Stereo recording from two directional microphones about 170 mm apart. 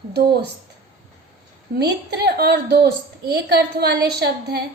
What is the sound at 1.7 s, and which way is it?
A woman's voice, 75° right (ahead or behind).